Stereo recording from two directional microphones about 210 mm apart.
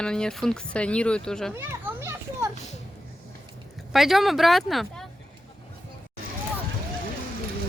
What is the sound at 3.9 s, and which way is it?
Speech, centre (ahead or behind).